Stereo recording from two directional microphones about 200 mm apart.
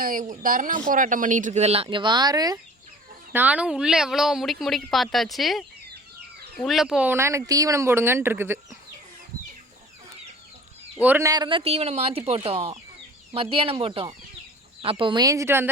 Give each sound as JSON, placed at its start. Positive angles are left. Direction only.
{"t": 0.0, "sound": "speech", "side_deg": -45}
{"t": 3.3, "sound": "speech", "side_deg": -5}
{"t": 11.0, "sound": "speech", "side_deg": -10}